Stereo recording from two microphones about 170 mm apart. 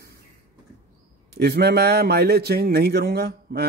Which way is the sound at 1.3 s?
70° right (ahead or behind).